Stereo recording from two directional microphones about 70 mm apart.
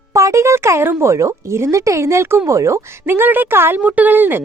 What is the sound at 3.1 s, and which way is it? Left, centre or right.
Speech, right.